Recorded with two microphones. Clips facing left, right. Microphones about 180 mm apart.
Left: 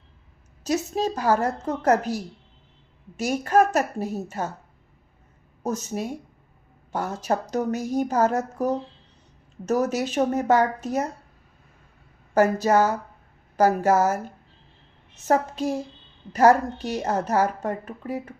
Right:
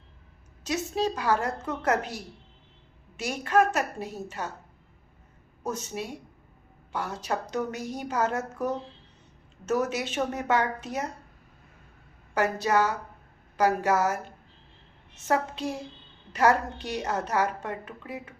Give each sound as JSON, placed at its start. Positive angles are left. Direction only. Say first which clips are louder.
{"t": 0.6, "sound": "a woman's voice", "louder": "left 3 dB", "side_deg": 40}
{"t": 5.6, "sound": "a woman's voice", "louder": "left 5 dB", "side_deg": 40}
{"t": 12.3, "sound": "a woman's voice", "louder": "left 6 dB", "side_deg": 40}